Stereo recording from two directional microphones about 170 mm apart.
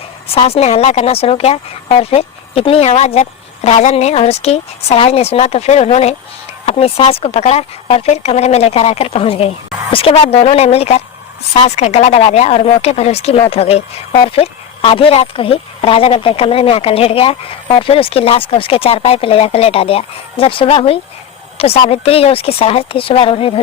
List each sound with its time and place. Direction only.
0.3 s speech: 35° left (ahead or behind)